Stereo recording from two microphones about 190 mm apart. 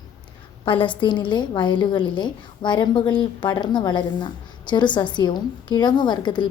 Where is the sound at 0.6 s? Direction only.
25° left (ahead or behind).